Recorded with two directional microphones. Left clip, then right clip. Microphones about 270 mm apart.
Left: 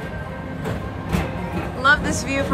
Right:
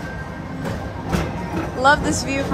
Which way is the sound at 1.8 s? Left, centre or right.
Centre.